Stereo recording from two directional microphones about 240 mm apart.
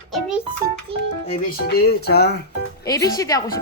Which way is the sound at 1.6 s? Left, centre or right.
Left.